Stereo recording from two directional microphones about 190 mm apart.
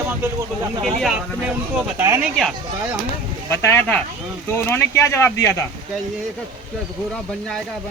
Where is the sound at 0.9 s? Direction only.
5° right (ahead or behind).